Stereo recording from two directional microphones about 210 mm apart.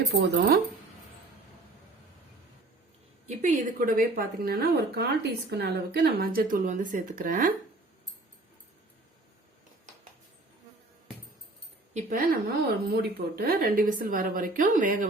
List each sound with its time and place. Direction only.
0.1 s a woman's voice: 55° right (ahead or behind)
3.2 s a woman's voice: 35° right (ahead or behind)
11.9 s a woman's voice: 40° right (ahead or behind)